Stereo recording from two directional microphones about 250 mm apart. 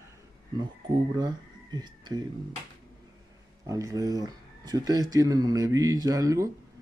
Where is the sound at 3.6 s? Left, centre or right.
Centre.